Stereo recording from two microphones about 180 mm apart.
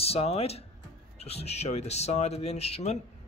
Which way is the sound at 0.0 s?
35° left (ahead or behind).